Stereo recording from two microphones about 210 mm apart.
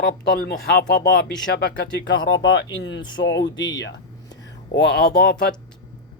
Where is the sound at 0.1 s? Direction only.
45° left (ahead or behind).